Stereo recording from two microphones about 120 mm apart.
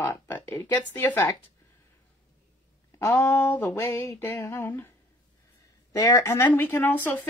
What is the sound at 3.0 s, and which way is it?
Speech, 20° left (ahead or behind).